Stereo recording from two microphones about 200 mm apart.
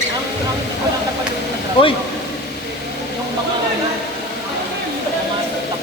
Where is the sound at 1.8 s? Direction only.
25° left (ahead or behind).